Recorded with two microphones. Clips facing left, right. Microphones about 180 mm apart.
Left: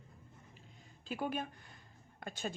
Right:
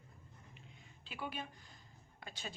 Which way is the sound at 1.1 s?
45° left (ahead or behind).